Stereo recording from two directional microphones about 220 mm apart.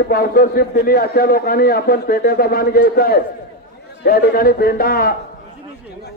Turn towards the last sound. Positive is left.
turn(degrees=40)  # may be behind; listen again after turning